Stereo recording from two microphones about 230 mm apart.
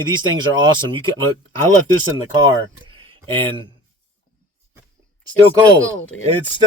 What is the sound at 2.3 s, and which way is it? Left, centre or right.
Speech, centre.